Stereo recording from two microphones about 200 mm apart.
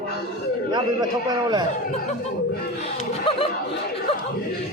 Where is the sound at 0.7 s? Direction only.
20° right (ahead or behind).